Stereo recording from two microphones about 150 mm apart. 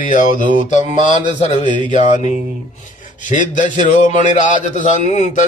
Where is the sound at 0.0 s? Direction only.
60° left (ahead or behind).